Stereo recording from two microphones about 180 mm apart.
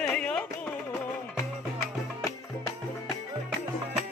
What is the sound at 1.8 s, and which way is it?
Music, 15° left (ahead or behind).